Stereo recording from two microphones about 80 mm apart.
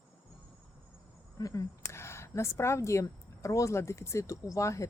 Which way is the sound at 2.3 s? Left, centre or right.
Left.